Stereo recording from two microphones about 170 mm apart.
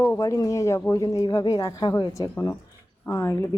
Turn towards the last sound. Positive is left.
turn(degrees=15)  # may be behind; listen again after turning